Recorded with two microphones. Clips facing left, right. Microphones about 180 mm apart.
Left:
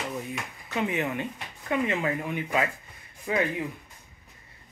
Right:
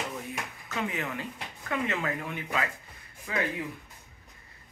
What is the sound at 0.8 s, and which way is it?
Speech, 20° left (ahead or behind).